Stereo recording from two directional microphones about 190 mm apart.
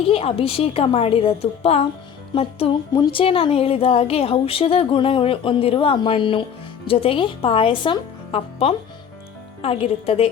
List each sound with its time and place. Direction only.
0.0 s a woman's voice: 30° left (ahead or behind)